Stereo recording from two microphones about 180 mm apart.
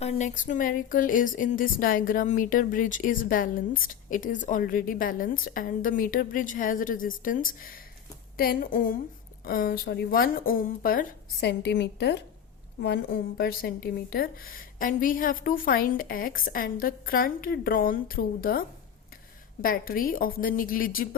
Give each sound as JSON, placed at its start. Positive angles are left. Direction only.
{"t": 0.0, "sound": "speech", "side_deg": 40}
{"t": 19.6, "sound": "speech", "side_deg": 55}